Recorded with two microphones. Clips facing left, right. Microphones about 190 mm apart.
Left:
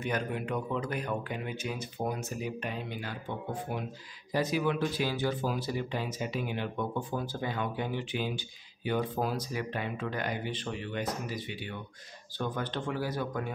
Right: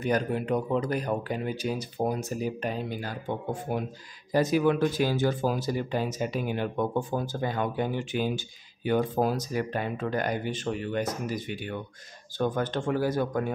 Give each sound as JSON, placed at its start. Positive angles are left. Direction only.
{"t": 0.0, "sound": "speech", "side_deg": -35}